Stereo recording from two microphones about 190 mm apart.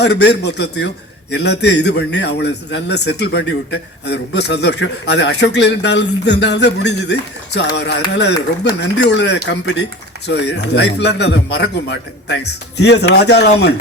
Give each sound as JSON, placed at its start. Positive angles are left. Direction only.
{"t": 0.0, "sound": "a man's voice", "side_deg": 60}